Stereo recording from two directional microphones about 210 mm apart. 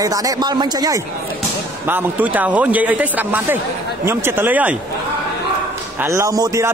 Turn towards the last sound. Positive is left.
turn(degrees=-15)  # may be behind; listen again after turning